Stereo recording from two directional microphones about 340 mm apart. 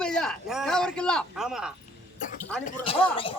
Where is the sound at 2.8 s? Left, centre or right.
Centre.